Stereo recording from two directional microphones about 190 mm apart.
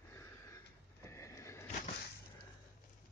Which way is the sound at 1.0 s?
15° left (ahead or behind).